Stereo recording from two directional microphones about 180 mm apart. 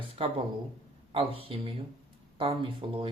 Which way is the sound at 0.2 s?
30° right (ahead or behind).